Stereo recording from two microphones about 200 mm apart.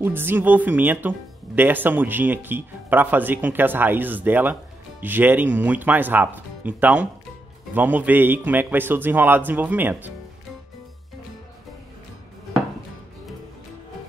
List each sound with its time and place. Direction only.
0.0 s speech: 10° right (ahead or behind)